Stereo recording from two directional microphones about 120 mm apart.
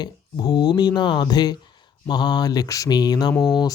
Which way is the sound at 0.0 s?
35° left (ahead or behind).